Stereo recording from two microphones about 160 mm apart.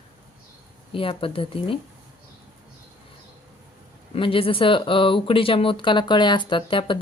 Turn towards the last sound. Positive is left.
turn(degrees=30)  # may be behind; listen again after turning